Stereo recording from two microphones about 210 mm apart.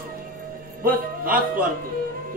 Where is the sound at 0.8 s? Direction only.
40° right (ahead or behind).